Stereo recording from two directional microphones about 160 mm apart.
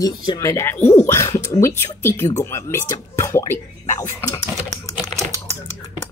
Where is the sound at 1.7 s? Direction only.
15° left (ahead or behind).